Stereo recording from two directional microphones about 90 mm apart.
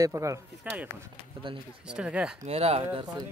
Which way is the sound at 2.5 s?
90° right.